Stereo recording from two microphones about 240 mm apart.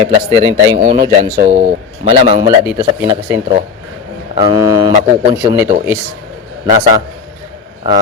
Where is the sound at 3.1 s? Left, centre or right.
Centre.